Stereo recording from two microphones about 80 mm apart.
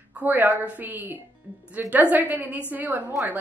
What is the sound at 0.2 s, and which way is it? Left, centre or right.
A woman's voice, right.